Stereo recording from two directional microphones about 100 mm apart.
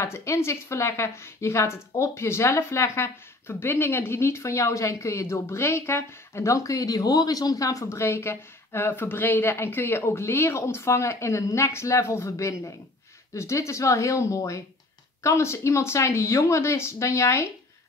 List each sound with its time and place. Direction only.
0.0 s a woman's voice: 30° left (ahead or behind)